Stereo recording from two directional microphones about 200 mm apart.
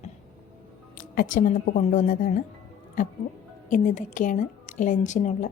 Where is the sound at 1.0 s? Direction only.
45° left (ahead or behind).